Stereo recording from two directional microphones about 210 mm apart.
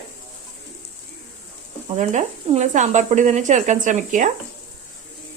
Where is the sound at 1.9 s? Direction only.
30° right (ahead or behind).